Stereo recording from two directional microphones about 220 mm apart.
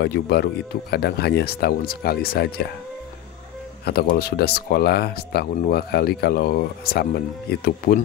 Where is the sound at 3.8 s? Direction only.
45° left (ahead or behind).